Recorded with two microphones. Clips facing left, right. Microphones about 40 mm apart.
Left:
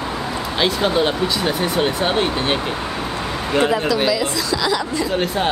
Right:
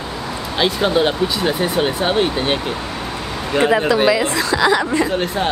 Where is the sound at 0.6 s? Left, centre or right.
Centre.